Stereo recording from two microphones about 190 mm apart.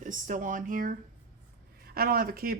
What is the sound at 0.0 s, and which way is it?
Speech, 45° right (ahead or behind).